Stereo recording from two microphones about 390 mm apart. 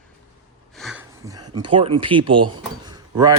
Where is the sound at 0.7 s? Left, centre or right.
Centre.